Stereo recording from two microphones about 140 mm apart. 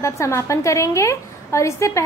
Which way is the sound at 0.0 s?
20° left (ahead or behind).